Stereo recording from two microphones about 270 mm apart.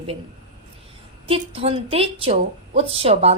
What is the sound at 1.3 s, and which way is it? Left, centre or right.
A woman's voice, right.